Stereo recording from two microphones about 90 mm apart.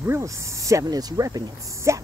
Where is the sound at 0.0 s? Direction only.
30° right (ahead or behind).